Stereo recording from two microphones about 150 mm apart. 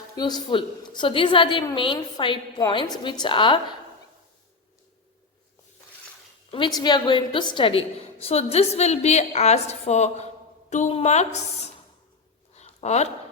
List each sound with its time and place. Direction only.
0.2 s a woman's voice: 30° left (ahead or behind)
6.5 s a woman's voice: 30° left (ahead or behind); by 11.7 s 50° left (ahead or behind)
12.5 s a sound: 45° left (ahead or behind)